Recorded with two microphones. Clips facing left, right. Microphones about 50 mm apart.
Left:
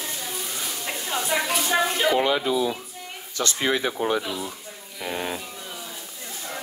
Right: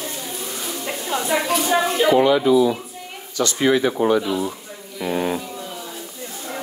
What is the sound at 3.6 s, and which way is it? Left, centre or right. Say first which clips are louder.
Speech: right 7 dB; right.